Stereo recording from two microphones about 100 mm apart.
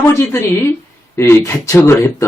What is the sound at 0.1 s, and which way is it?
Speech, 25° left (ahead or behind).